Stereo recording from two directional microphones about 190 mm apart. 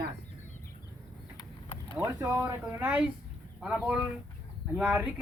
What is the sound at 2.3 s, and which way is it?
Speech, 10° right (ahead or behind).